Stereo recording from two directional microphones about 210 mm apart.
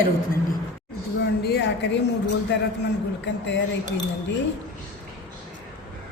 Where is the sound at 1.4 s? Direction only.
55° left (ahead or behind).